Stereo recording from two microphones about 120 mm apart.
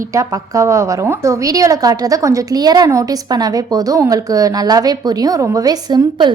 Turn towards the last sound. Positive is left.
turn(degrees=-35)  # may be behind; listen again after turning